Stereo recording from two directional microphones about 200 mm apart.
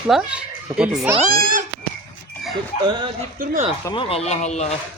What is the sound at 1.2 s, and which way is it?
Speech, 45° right (ahead or behind).